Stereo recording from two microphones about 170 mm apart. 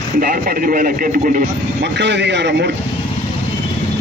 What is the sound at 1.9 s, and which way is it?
Speech, 90° right.